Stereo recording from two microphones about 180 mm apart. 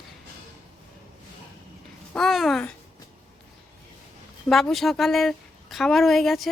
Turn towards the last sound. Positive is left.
turn(degrees=0)  # may be behind; listen again after turning